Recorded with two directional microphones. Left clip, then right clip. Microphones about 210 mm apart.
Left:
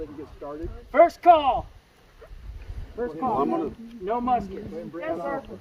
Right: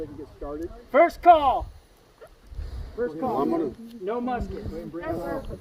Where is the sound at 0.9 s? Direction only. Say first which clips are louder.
Even; 15° left (ahead or behind).